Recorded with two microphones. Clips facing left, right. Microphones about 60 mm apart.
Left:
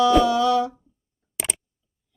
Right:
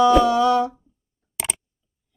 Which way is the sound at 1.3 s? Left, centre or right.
Centre.